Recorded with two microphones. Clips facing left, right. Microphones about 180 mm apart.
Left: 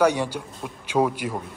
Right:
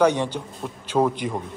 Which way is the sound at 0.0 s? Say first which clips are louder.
Right 1 dB; 10° left (ahead or behind).